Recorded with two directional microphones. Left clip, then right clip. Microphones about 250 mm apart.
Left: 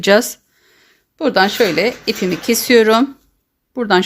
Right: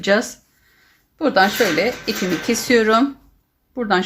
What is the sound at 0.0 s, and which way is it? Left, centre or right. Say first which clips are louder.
Speech: left 5 dB; left.